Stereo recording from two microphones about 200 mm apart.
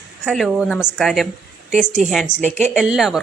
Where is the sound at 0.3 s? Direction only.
Centre (ahead or behind).